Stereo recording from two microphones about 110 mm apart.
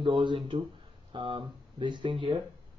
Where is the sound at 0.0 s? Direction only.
45° right (ahead or behind).